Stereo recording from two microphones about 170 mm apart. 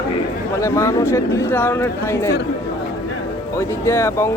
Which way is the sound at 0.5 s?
15° left (ahead or behind).